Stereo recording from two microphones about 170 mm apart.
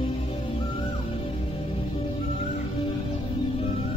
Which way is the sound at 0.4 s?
25° left (ahead or behind).